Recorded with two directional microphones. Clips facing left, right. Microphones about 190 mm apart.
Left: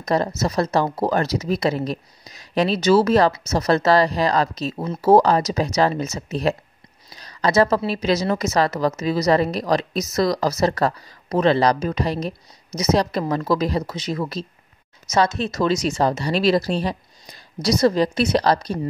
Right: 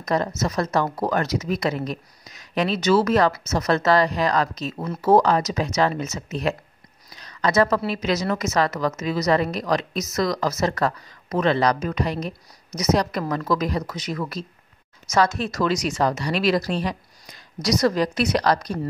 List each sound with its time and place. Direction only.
0.0 s a woman's voice: 35° left (ahead or behind)